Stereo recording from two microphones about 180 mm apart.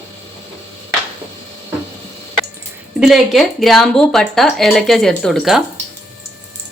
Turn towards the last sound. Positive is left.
turn(degrees=0)  # may be behind; listen again after turning